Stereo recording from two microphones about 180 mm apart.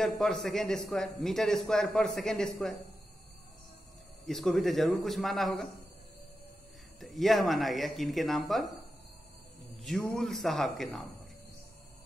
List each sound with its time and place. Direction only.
0.0 s a man's voice: centre (ahead or behind)
4.3 s a man's voice: centre (ahead or behind)
7.0 s a man's voice: centre (ahead or behind)
10.1 s a man's voice: centre (ahead or behind)